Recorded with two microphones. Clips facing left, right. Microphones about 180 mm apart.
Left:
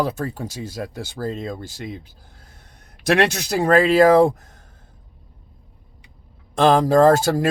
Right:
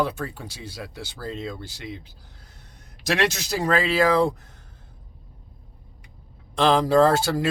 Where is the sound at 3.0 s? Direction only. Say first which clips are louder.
Left 5 dB; 60° left (ahead or behind).